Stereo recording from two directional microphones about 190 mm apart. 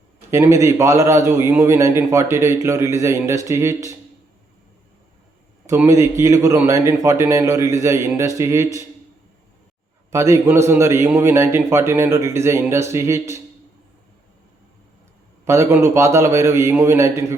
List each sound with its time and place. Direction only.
0.3 s a man's voice: 15° right (ahead or behind)
5.6 s a man's voice: 15° right (ahead or behind)
10.1 s a man's voice: 15° right (ahead or behind)
15.4 s a man's voice: 15° right (ahead or behind)